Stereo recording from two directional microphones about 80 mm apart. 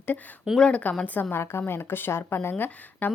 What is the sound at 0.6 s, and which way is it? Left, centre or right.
A woman's voice, centre.